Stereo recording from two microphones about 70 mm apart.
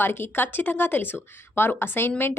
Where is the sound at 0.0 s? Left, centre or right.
Left.